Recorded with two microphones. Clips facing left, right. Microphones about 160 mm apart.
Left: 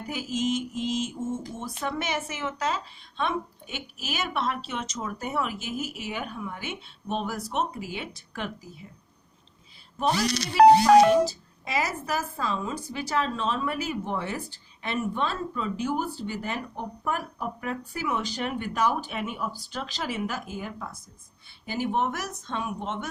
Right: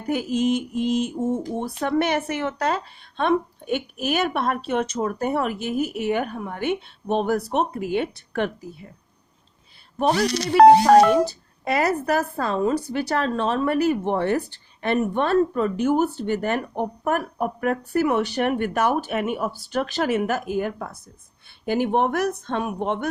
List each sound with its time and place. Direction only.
0.0 s mantra: 55° right (ahead or behind)
10.0 s mantra: 55° right (ahead or behind)